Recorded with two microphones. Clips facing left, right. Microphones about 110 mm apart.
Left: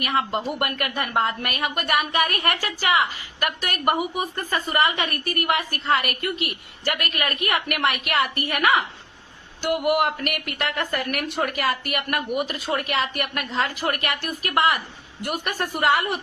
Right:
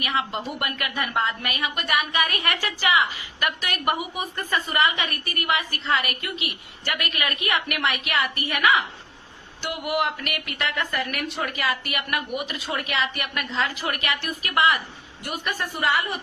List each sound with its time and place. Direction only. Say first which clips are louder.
0.0 s a woman's voice: left 3 dB; 45° left (ahead or behind)